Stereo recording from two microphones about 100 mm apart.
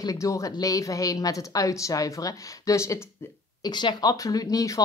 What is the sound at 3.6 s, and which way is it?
A woman's voice, 45° left (ahead or behind).